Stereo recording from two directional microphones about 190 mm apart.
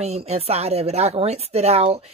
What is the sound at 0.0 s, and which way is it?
Speech, 35° right (ahead or behind).